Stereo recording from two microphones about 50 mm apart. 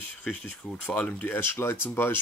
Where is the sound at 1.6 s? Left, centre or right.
Left.